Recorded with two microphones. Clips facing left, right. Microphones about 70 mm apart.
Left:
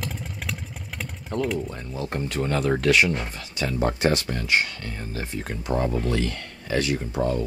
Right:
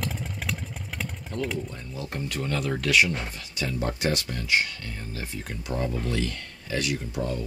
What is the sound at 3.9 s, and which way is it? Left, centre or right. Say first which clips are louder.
Speech: left 5 dB; left.